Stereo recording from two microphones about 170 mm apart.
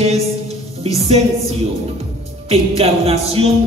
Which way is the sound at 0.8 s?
40° right (ahead or behind).